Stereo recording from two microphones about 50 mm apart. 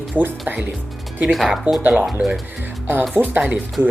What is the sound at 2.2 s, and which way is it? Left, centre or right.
Speech, right.